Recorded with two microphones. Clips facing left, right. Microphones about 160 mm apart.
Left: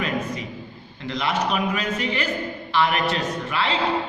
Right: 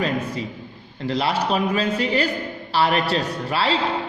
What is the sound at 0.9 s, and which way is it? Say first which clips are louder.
A man's voice: right 3 dB; 35° right (ahead or behind).